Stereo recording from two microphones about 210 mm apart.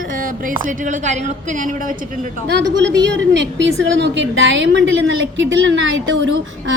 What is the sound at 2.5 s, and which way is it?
A woman's voice, 55° right (ahead or behind).